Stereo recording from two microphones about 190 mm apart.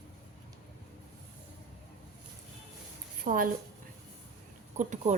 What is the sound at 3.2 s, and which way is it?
Speech, 50° right (ahead or behind).